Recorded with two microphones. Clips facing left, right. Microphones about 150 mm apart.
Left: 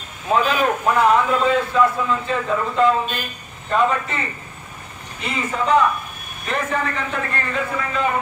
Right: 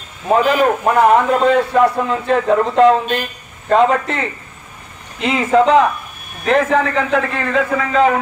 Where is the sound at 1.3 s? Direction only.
60° right (ahead or behind).